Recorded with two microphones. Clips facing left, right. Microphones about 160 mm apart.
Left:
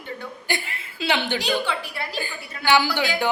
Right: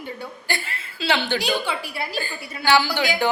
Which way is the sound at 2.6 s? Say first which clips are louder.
Right 1 dB; 15° left (ahead or behind).